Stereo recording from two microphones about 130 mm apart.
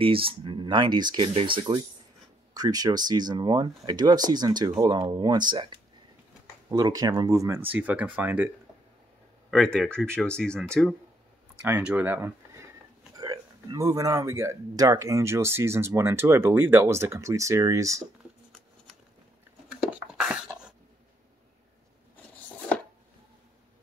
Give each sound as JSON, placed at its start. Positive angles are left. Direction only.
{"t": 0.0, "sound": "speech", "side_deg": -45}
{"t": 2.5, "sound": "speech", "side_deg": -30}
{"t": 6.7, "sound": "speech", "side_deg": -30}
{"t": 7.7, "sound": "speech", "side_deg": -10}
{"t": 9.5, "sound": "speech", "side_deg": 5}
{"t": 11.6, "sound": "speech", "side_deg": -15}
{"t": 13.2, "sound": "speech", "side_deg": -30}
{"t": 19.8, "sound": "beatboxing", "side_deg": -5}